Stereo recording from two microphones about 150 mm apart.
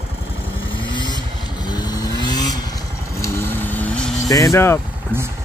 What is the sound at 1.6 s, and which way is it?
Motorcycle, 25° left (ahead or behind).